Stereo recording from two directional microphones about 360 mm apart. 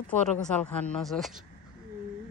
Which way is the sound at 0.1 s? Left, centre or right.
Centre.